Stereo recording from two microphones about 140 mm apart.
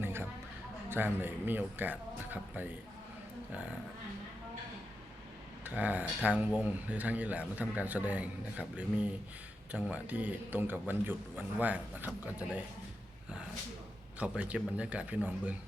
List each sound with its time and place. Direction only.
0.0 s a sound: 15° right (ahead or behind)
0.9 s speech: 15° right (ahead or behind)
5.6 s speech: 10° right (ahead or behind)
9.9 s speech: 10° right (ahead or behind)
14.2 s speech: 10° right (ahead or behind)